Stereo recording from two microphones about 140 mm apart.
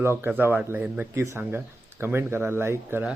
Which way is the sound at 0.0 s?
15° right (ahead or behind).